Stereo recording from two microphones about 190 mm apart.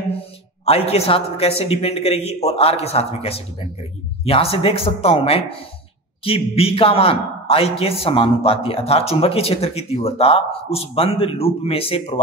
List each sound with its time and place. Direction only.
0.7 s a man's voice: 30° left (ahead or behind)